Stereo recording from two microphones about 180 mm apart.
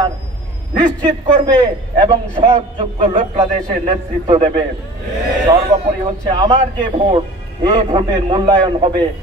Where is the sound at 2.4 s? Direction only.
25° right (ahead or behind).